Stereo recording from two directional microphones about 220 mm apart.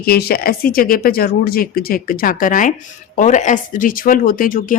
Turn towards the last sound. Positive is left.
turn(degrees=40)  # may be behind; listen again after turning